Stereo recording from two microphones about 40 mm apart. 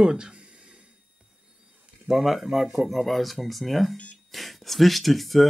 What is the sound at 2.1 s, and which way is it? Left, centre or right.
Speech, centre.